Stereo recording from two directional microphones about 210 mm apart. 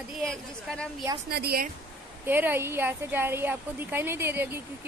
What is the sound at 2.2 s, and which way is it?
Speech, 10° right (ahead or behind).